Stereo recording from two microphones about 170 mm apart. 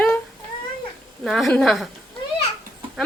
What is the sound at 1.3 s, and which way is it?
Speech, centre (ahead or behind).